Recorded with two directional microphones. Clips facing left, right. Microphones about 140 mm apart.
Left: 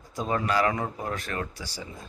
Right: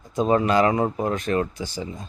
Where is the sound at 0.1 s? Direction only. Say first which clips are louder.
Right 7 dB; 20° right (ahead or behind).